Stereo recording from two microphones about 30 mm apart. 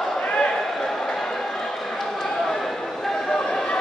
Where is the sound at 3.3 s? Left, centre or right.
Centre.